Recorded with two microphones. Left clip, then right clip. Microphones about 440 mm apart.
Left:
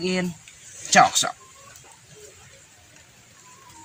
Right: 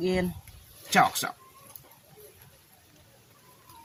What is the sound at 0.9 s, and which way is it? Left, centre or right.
Speech, right.